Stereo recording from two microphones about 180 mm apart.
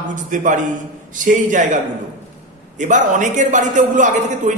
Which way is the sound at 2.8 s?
45° right (ahead or behind).